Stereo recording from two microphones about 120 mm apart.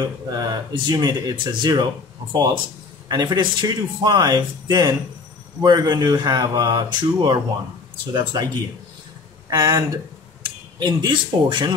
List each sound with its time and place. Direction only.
0.0 s speech: 35° right (ahead or behind)
9.5 s speech: 30° right (ahead or behind)